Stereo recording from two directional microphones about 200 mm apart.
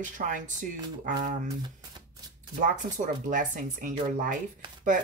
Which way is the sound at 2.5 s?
40° right (ahead or behind).